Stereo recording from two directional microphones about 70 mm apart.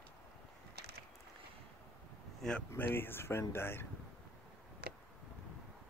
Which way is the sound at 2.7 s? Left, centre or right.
Left.